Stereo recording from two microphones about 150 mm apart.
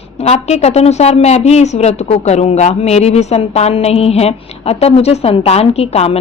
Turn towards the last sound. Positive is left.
turn(degrees=45)  # may be behind; listen again after turning